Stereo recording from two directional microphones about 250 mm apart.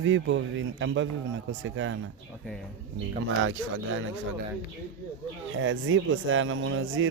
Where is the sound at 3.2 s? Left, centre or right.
Right.